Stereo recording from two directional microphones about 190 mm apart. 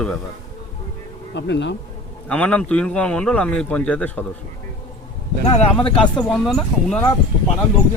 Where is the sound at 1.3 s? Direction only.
70° left (ahead or behind).